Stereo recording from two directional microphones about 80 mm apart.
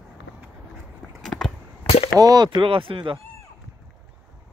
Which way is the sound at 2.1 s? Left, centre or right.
Right.